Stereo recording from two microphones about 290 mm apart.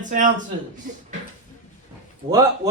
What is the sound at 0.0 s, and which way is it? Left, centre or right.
Speech, right.